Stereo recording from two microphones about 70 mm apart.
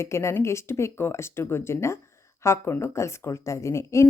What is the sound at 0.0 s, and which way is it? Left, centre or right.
A woman's voice, left.